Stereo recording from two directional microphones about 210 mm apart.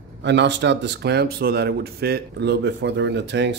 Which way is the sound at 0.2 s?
55° right (ahead or behind).